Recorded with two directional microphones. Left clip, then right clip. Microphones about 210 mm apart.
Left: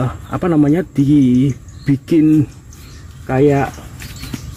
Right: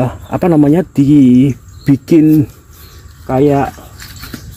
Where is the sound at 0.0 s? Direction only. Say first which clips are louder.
Right 6 dB; 25° right (ahead or behind).